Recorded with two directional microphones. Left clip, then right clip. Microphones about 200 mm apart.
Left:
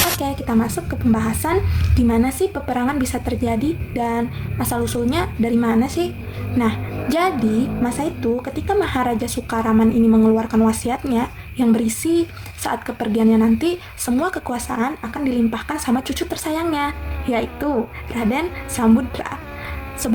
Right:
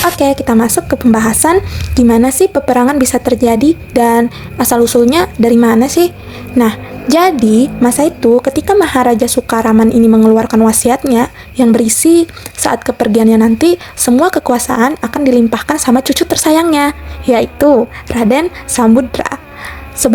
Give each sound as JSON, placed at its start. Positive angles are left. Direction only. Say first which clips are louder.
{"t": 0.2, "sound": "a woman's voice", "louder": "right 11 dB", "side_deg": -40}